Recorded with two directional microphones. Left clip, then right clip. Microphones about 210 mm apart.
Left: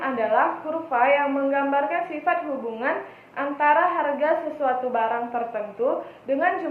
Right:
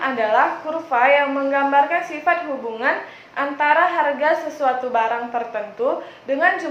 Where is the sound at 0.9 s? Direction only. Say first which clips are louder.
Right 4 dB; 5° right (ahead or behind).